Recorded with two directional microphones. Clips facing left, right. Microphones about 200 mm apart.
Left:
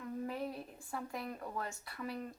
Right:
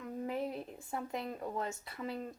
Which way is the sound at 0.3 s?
25° right (ahead or behind).